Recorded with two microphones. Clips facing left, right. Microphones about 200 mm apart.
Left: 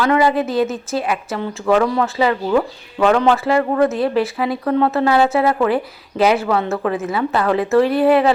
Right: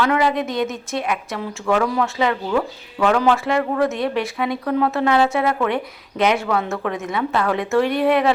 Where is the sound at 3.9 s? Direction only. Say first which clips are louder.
Left 4 dB; 30° left (ahead or behind).